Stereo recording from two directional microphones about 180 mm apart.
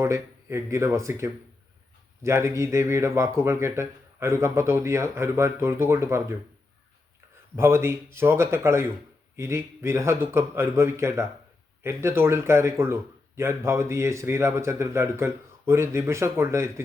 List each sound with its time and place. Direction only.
0.0 s a man's voice: 15° right (ahead or behind)
7.5 s a man's voice: 15° right (ahead or behind)